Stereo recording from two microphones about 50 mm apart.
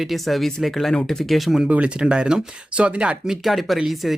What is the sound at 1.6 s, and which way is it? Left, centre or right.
Speech, right.